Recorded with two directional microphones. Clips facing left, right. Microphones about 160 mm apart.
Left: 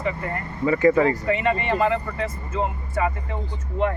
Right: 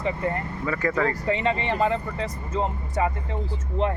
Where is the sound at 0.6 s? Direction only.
20° left (ahead or behind).